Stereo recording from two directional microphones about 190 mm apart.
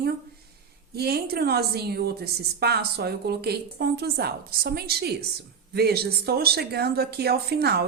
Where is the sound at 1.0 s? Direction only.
55° right (ahead or behind).